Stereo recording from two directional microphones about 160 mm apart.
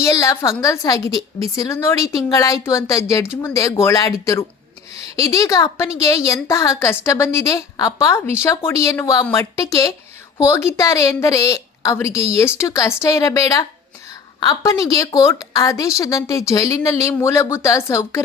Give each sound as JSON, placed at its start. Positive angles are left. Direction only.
{"t": 0.0, "sound": "a woman's voice", "side_deg": 20}